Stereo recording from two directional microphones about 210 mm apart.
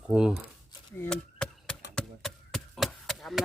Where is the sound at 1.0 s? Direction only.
5° left (ahead or behind).